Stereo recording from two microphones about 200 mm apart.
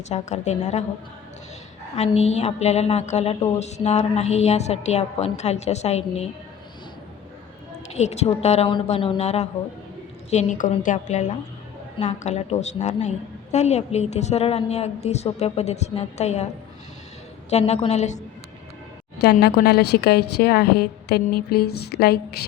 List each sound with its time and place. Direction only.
0.1 s a woman's voice: 35° left (ahead or behind)
2.1 s a woman's voice: 35° left (ahead or behind)
7.9 s a woman's voice: 35° left (ahead or behind)
17.5 s a woman's voice: 35° left (ahead or behind)
19.2 s a woman's voice: 55° left (ahead or behind)